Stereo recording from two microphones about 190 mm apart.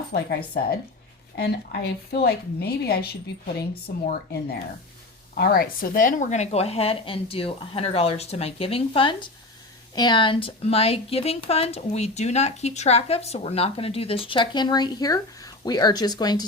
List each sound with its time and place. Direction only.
0.1 s a woman's voice: 55° left (ahead or behind); by 16.5 s 20° left (ahead or behind)